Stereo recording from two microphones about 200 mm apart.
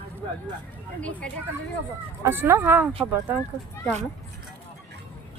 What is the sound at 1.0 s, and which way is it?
Speech, 5° left (ahead or behind).